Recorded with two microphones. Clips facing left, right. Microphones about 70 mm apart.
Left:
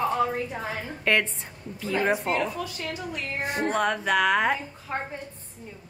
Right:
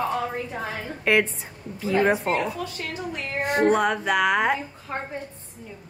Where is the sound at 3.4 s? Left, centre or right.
Right.